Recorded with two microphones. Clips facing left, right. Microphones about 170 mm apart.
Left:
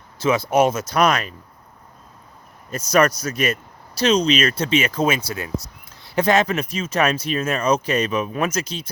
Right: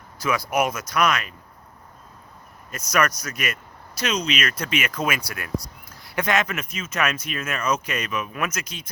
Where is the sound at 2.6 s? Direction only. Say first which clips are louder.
Left 6 dB; 30° left (ahead or behind).